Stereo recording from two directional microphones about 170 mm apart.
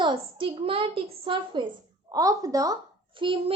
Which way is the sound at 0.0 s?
30° right (ahead or behind).